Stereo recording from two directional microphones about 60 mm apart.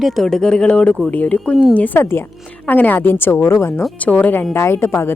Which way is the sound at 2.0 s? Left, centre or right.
Left.